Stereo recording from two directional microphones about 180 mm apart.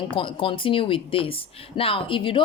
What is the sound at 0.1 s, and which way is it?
Speech, 30° left (ahead or behind).